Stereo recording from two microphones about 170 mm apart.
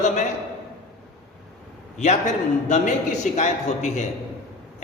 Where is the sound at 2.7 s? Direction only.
45° left (ahead or behind).